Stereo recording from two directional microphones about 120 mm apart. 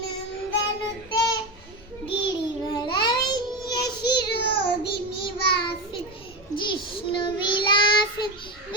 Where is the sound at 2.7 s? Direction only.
35° left (ahead or behind).